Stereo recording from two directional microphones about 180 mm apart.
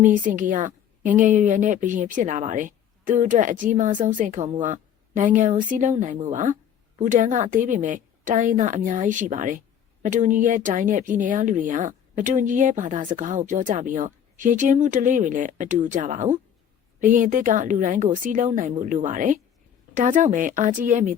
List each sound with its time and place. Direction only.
0.0 s speech: 45° right (ahead or behind)